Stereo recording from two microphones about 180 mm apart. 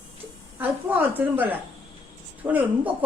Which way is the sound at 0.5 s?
10° right (ahead or behind).